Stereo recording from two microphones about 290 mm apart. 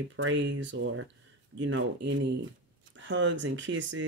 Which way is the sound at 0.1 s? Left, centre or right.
Right.